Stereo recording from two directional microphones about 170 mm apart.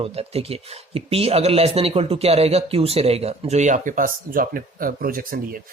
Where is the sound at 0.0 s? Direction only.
35° right (ahead or behind).